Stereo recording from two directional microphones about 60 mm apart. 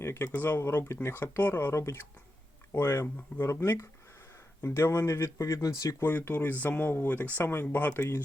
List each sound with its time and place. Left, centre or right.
0.0 s speech: left
0.3 s speech: left
0.6 s speech: left
1.4 s speech: left
3.5 s speech: left
5.4 s speech: left
6.0 s speech: left